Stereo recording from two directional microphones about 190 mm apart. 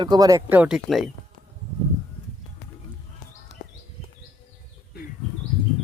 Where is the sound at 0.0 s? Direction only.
20° right (ahead or behind); by 1.1 s centre (ahead or behind).